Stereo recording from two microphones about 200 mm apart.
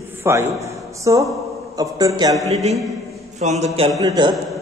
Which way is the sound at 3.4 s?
35° right (ahead or behind).